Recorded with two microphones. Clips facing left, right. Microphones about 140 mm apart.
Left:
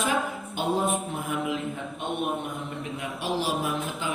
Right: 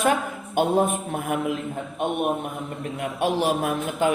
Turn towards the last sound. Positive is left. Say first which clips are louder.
# right 7 dB
turn(degrees=-55)  # may be behind; listen again after turning